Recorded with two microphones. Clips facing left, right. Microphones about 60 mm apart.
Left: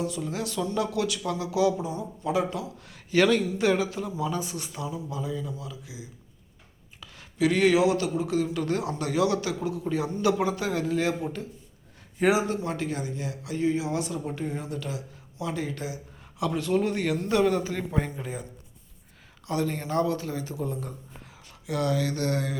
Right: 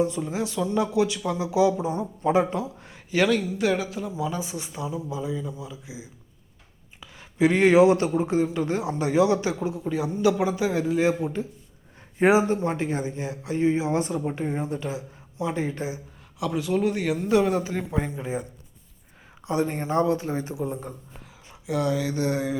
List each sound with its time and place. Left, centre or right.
0.0 s a man's voice: right
1.9 s a man's voice: right
3.1 s a man's voice: centre
7.3 s a man's voice: right
9.8 s speech: centre
12.2 s a man's voice: right
16.4 s a man's voice: centre
19.5 s a man's voice: right